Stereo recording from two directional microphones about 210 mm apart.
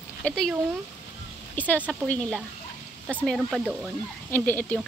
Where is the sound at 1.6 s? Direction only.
5° left (ahead or behind).